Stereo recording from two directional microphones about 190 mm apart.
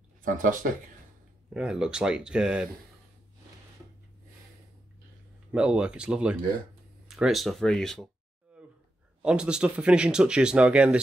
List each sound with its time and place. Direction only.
0.2 s speech: 45° right (ahead or behind)
1.5 s speech: 5° right (ahead or behind)
5.5 s speech: 5° right (ahead or behind)
9.2 s speech: 5° right (ahead or behind)